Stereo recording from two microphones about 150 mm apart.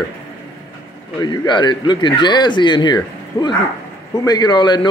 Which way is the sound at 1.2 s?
30° left (ahead or behind).